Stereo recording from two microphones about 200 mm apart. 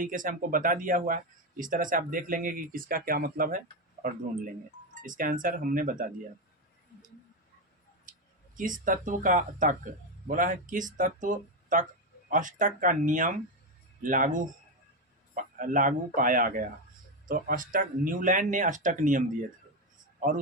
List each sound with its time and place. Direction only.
0.0 s speech: 40° right (ahead or behind)
5.0 s speech: 40° right (ahead or behind)
8.1 s a sound: 45° right (ahead or behind)
8.5 s speech: 40° right (ahead or behind)
15.5 s a man's voice: 40° right (ahead or behind)